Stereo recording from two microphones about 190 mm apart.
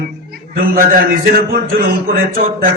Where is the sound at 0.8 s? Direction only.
50° right (ahead or behind).